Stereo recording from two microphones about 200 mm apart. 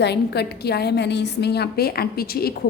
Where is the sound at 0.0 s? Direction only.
55° left (ahead or behind).